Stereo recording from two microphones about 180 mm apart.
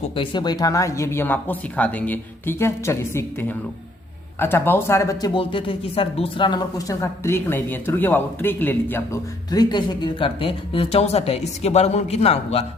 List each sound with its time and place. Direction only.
0.0 s speech: 25° left (ahead or behind)
5.3 s speech: 30° left (ahead or behind)